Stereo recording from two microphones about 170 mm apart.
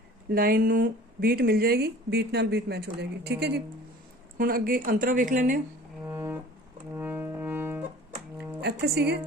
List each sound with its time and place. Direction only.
0.3 s speech: 60° right (ahead or behind)
4.4 s a woman's voice: 60° right (ahead or behind)
6.1 s music: 15° right (ahead or behind)
8.6 s speech: 70° right (ahead or behind)